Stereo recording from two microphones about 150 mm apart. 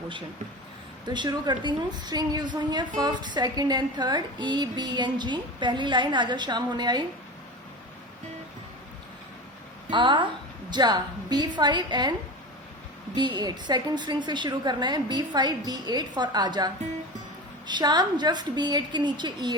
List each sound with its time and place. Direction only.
1.0 s a woman's voice: 30° right (ahead or behind)
9.9 s a woman's voice: 30° right (ahead or behind)
13.1 s a woman's voice: 30° right (ahead or behind)